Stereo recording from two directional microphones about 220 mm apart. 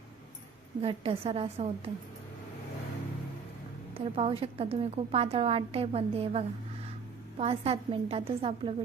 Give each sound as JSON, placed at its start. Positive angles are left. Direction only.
{"t": 0.8, "sound": "a woman's voice", "side_deg": -25}
{"t": 3.9, "sound": "a woman's voice", "side_deg": -25}